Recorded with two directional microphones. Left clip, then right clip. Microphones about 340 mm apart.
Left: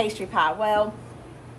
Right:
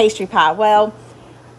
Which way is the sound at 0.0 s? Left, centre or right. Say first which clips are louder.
Right 9 dB; right.